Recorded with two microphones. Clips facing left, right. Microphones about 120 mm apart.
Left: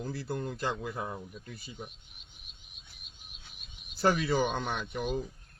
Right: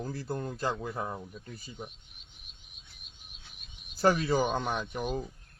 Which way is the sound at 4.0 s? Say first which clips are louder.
Right 1 dB; 40° right (ahead or behind).